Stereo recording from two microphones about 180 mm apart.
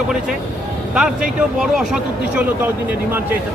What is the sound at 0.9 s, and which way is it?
Speech, 5° right (ahead or behind).